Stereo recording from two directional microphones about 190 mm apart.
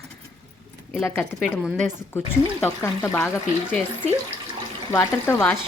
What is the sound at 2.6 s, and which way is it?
Speech, 10° left (ahead or behind).